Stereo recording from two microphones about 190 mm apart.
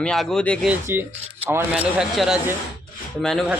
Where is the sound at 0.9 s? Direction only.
10° right (ahead or behind).